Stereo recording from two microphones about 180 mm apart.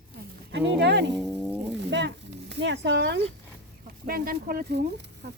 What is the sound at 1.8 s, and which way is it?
Speech, 75° right (ahead or behind).